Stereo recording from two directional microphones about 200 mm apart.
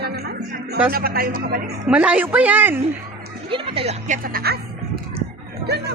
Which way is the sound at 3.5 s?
25° right (ahead or behind).